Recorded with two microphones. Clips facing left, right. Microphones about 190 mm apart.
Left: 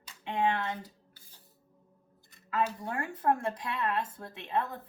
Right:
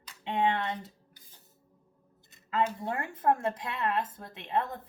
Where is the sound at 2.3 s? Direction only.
25° right (ahead or behind).